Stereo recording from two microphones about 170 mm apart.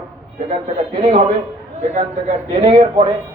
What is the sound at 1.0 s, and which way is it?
A man's voice, 35° right (ahead or behind).